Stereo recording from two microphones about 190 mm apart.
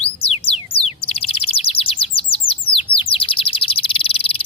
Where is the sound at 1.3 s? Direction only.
30° left (ahead or behind).